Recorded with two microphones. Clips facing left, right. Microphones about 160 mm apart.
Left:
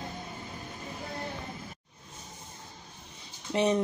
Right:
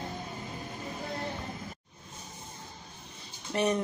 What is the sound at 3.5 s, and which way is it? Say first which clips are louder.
Speech: left 2 dB; 20° left (ahead or behind).